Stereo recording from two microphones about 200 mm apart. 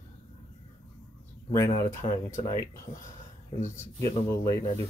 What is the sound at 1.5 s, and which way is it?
Speech, 10° left (ahead or behind).